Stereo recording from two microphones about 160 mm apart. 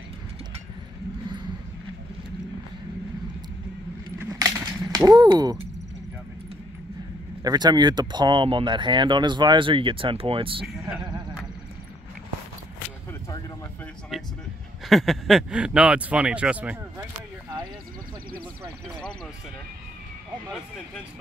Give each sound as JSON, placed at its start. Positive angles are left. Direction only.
{"t": 4.2, "sound": "a sound", "side_deg": -20}
{"t": 7.4, "sound": "speech", "side_deg": -25}
{"t": 14.1, "sound": "speech", "side_deg": 0}